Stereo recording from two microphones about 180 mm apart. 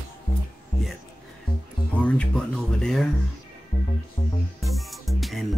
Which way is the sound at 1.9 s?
5° left (ahead or behind).